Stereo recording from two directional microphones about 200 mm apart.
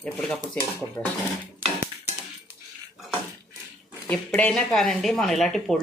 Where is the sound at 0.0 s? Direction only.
5° left (ahead or behind).